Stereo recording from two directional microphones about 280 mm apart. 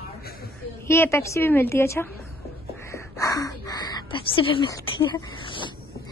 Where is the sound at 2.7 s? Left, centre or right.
Centre.